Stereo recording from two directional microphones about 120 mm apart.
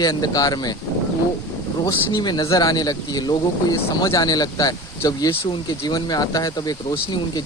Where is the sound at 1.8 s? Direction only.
35° left (ahead or behind).